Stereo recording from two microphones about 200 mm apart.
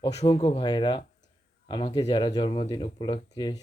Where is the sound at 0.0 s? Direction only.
30° left (ahead or behind).